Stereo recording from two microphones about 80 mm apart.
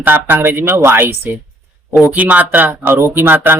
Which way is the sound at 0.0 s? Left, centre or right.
Right.